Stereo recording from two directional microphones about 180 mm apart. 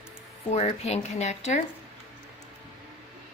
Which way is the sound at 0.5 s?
35° left (ahead or behind).